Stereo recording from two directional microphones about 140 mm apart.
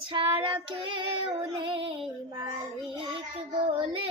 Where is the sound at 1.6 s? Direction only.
40° right (ahead or behind).